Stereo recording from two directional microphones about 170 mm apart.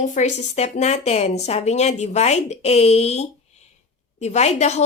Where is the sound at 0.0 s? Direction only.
45° left (ahead or behind).